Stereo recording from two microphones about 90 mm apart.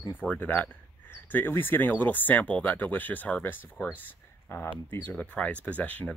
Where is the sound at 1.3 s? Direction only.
25° left (ahead or behind).